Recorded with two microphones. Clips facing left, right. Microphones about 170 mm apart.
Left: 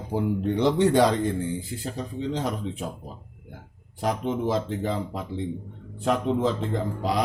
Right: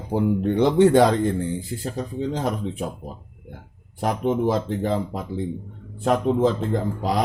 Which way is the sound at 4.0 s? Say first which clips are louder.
Right 4 dB; 50° right (ahead or behind).